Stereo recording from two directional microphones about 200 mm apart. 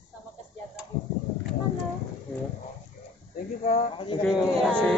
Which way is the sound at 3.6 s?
35° left (ahead or behind).